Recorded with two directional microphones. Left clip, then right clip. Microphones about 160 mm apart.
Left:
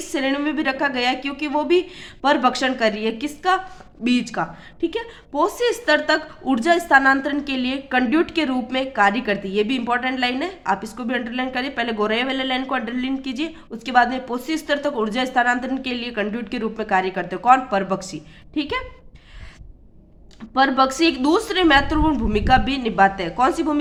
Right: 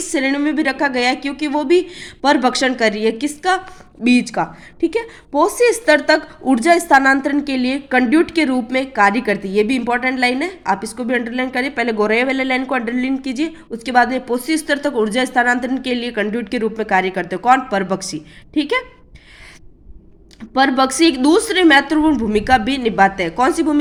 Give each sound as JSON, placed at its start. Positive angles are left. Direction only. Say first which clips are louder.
{"t": 0.0, "sound": "speech", "louder": "right 4 dB", "side_deg": -25}
{"t": 20.5, "sound": "speech", "louder": "right 2 dB", "side_deg": -30}